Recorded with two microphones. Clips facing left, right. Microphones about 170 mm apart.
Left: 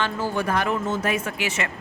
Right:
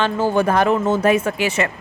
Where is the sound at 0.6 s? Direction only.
90° right.